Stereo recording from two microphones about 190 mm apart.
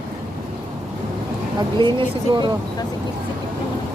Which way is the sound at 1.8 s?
25° right (ahead or behind).